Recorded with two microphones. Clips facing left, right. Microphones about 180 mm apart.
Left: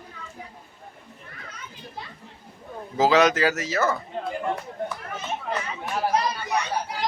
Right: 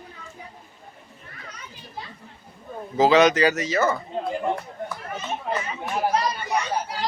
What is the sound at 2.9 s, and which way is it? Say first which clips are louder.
A man's voice: right 2 dB; centre (ahead or behind).